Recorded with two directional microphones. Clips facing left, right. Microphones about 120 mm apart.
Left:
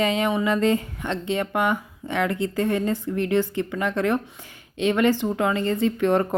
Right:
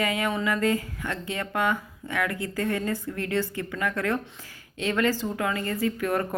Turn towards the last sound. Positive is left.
turn(degrees=25)  # may be behind; listen again after turning